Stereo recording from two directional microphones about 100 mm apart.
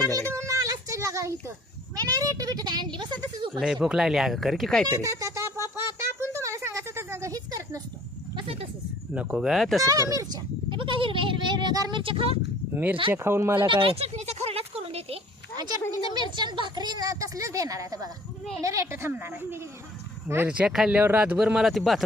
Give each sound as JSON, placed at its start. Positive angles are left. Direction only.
{"t": 0.0, "sound": "a sound", "side_deg": -30}
{"t": 2.0, "sound": "speech", "side_deg": -35}
{"t": 3.6, "sound": "speech", "side_deg": -5}
{"t": 4.9, "sound": "a sound", "side_deg": -35}
{"t": 9.1, "sound": "a man's voice", "side_deg": -15}
{"t": 9.5, "sound": "speech", "side_deg": 0}
{"t": 9.8, "sound": "speech", "side_deg": -35}
{"t": 10.7, "sound": "speech", "side_deg": -60}
{"t": 12.7, "sound": "speech", "side_deg": -15}
{"t": 13.6, "sound": "a sound", "side_deg": -55}
{"t": 15.5, "sound": "a sound", "side_deg": -45}
{"t": 16.3, "sound": "speech", "side_deg": -50}
{"t": 20.5, "sound": "a man's voice", "side_deg": -10}